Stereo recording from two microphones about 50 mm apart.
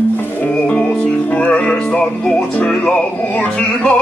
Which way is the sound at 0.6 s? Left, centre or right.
Left.